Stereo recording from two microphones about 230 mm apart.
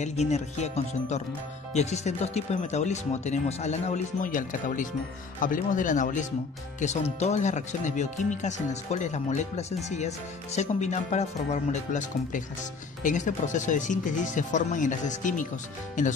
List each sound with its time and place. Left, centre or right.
0.0 s speech: left